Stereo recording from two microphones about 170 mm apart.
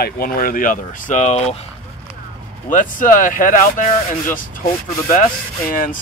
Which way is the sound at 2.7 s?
50° left (ahead or behind).